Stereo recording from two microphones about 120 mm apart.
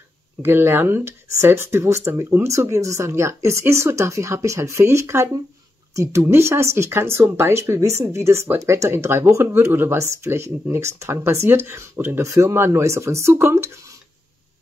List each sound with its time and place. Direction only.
0.4 s speech: 20° right (ahead or behind)